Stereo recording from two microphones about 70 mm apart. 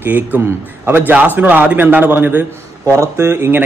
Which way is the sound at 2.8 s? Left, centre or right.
Right.